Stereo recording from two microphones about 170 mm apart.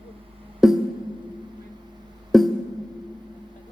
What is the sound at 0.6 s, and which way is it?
Music, centre (ahead or behind).